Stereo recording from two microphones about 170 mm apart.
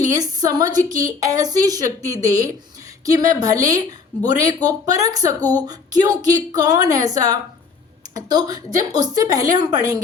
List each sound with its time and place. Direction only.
0.2 s a woman's voice: 20° right (ahead or behind)